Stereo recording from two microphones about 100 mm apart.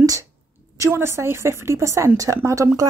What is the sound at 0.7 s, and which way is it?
Speech, 25° right (ahead or behind).